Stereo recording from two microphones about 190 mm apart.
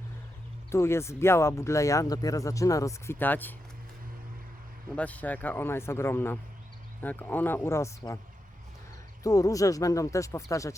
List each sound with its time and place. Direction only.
0.7 s speech: 15° left (ahead or behind)
4.9 s speech: 10° left (ahead or behind)
9.2 s speech: 20° left (ahead or behind)